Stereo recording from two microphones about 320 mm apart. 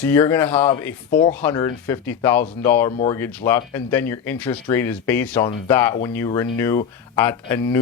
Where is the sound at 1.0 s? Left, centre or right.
Centre.